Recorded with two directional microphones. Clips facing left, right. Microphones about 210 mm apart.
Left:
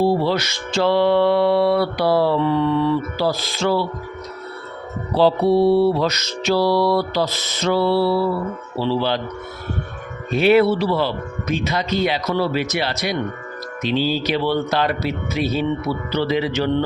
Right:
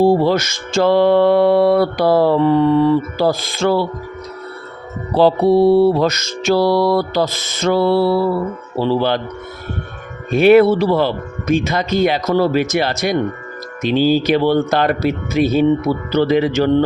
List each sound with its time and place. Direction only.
0.0 s music: 45° right (ahead or behind)
5.1 s music: 50° right (ahead or behind)
10.3 s music: 50° right (ahead or behind)